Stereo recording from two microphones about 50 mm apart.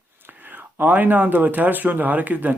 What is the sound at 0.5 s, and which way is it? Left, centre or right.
Speech, right.